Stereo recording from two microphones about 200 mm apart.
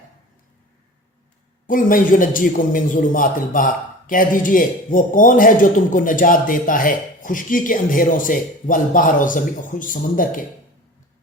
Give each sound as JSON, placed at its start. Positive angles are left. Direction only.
{"t": 1.6, "sound": "a man's voice", "side_deg": 40}